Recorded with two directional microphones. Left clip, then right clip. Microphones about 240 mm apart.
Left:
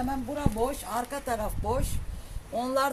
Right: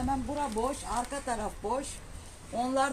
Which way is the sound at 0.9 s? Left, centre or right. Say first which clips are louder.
Left 2 dB; left.